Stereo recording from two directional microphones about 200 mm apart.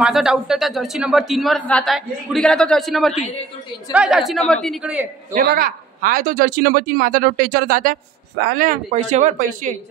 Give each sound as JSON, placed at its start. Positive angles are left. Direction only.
{"t": 0.0, "sound": "a man's voice", "side_deg": -5}
{"t": 5.3, "sound": "speech", "side_deg": -45}